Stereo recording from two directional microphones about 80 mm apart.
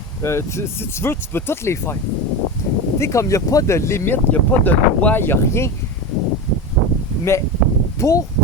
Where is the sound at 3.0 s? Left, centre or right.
Left.